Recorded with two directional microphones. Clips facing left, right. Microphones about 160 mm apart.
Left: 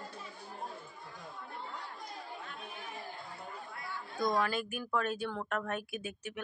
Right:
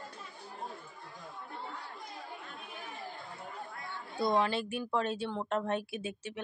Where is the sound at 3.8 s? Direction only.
25° right (ahead or behind).